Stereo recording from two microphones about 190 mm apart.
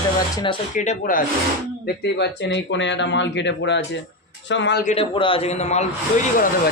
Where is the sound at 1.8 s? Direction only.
65° left (ahead or behind).